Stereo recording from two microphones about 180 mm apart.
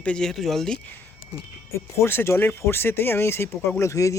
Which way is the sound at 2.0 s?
15° left (ahead or behind).